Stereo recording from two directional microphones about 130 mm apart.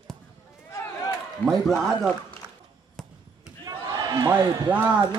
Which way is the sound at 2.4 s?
15° right (ahead or behind).